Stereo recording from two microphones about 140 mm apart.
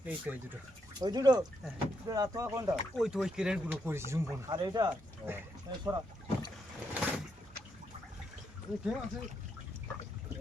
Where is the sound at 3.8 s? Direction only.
20° right (ahead or behind).